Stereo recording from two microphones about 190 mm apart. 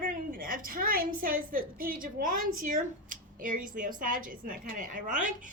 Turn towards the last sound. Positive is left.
turn(degrees=-40)  # may be behind; listen again after turning